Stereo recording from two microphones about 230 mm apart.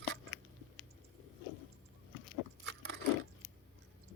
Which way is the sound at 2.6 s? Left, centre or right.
Right.